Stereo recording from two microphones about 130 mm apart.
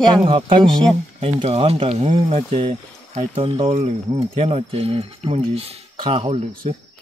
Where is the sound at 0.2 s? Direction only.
45° right (ahead or behind).